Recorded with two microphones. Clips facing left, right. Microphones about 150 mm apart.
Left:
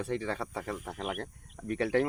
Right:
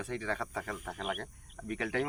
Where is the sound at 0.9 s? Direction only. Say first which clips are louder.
Right 1 dB; centre (ahead or behind).